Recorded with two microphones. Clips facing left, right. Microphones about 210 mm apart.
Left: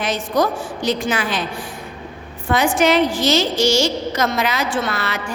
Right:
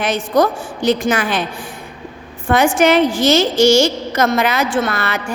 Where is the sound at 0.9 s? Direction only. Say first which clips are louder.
Right 5 dB; 50° right (ahead or behind).